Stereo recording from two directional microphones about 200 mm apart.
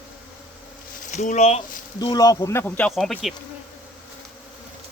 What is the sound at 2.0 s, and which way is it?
Speech, 20° left (ahead or behind).